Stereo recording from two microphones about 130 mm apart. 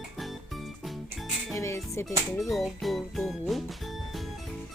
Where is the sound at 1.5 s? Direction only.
20° left (ahead or behind).